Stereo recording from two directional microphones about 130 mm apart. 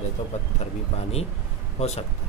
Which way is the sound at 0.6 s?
55° left (ahead or behind).